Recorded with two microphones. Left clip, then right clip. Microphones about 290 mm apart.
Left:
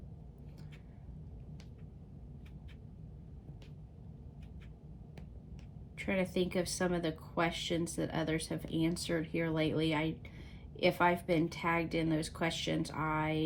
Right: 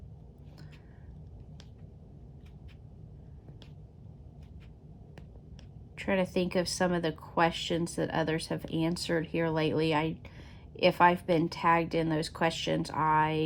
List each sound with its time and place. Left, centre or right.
6.1 s speech: right